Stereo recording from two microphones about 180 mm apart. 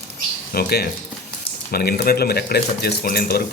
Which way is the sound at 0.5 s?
60° left (ahead or behind).